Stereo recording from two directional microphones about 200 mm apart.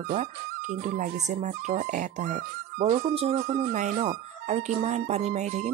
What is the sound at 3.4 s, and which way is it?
Music, 50° right (ahead or behind).